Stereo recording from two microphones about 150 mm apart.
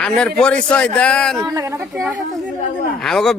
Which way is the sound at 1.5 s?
20° right (ahead or behind).